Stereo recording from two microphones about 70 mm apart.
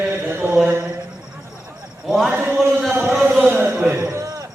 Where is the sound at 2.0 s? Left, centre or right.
Centre.